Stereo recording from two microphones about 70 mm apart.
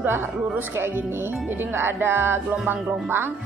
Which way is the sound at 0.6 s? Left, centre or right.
Right.